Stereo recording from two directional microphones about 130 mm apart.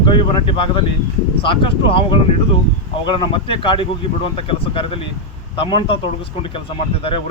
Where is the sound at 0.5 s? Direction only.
40° left (ahead or behind).